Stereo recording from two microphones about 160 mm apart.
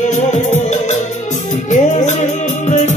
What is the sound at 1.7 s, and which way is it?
Music, 50° left (ahead or behind).